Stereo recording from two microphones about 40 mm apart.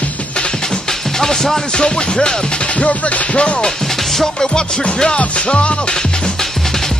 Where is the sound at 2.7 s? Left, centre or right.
Left.